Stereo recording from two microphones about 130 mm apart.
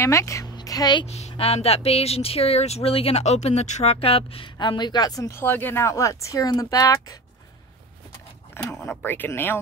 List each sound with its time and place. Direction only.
0.0 s speech: 20° left (ahead or behind)
0.6 s a sound: 30° left (ahead or behind)
1.0 s speech: 55° left (ahead or behind); by 5.4 s 30° left (ahead or behind)
5.4 s speech: 15° left (ahead or behind)
8.8 s speech: 15° left (ahead or behind)